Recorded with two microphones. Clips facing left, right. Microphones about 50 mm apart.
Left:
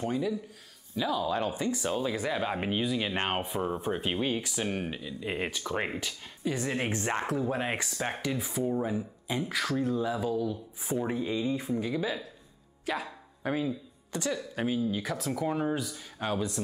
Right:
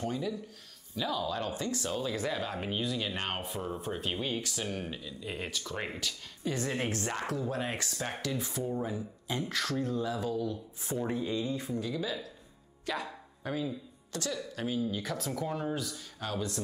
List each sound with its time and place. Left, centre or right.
0.0 s speech: centre
6.4 s a woman's voice: centre
7.2 s speech: left
8.4 s speech: centre
12.8 s speech: centre
13.4 s speech: left; by 15.4 s centre
15.4 s speech: centre